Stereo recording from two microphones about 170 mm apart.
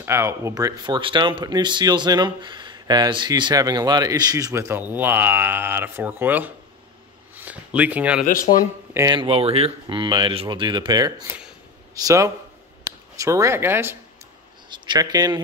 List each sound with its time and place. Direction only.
0.0 s speech: 15° right (ahead or behind)
8.5 s speech: 45° left (ahead or behind)
8.9 s speech: 20° right (ahead or behind)
14.7 s a man's voice: 25° right (ahead or behind)